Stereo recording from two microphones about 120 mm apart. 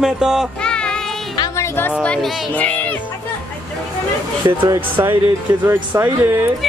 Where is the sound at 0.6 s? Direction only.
5° left (ahead or behind).